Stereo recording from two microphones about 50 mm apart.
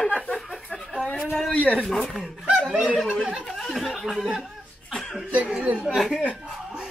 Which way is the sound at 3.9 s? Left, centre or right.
Centre.